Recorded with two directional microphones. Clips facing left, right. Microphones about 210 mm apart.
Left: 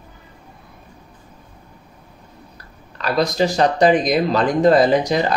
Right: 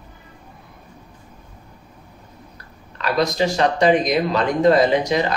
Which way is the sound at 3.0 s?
35° left (ahead or behind).